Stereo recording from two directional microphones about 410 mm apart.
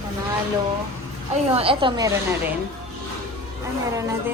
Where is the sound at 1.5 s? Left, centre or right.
Centre.